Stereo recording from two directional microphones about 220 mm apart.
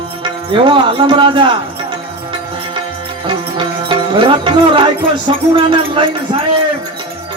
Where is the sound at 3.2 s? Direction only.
20° right (ahead or behind).